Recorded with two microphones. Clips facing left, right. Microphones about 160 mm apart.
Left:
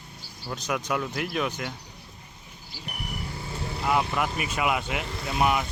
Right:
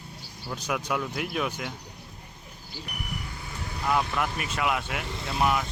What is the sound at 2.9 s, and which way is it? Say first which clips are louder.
Vehicle: left 3 dB; 30° left (ahead or behind).